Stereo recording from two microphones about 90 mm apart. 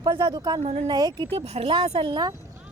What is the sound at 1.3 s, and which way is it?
Speech, 90° right.